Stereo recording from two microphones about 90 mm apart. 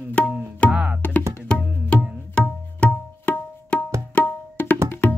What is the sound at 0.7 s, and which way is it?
Music, 10° right (ahead or behind).